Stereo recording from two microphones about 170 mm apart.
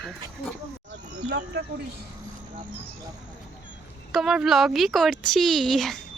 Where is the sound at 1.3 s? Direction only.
85° right.